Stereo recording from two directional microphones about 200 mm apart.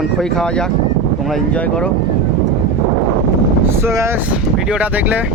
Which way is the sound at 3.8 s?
15° right (ahead or behind).